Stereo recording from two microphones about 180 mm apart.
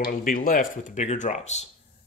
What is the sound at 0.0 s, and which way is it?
Speech, 50° left (ahead or behind).